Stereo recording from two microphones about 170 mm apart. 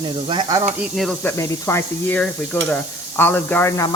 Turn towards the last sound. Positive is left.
turn(degrees=15)  # may be behind; listen again after turning